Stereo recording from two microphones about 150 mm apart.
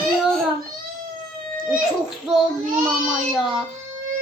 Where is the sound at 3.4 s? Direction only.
5° right (ahead or behind).